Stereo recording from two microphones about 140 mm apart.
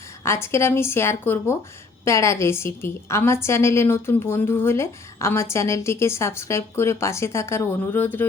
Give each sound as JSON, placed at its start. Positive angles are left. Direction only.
{"t": 0.2, "sound": "a woman's voice", "side_deg": 20}